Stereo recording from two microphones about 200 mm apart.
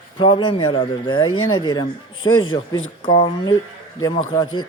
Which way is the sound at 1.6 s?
20° left (ahead or behind).